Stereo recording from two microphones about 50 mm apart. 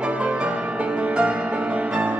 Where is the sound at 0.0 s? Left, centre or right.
Right.